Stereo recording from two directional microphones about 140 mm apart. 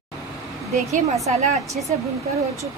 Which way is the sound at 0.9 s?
55° right (ahead or behind).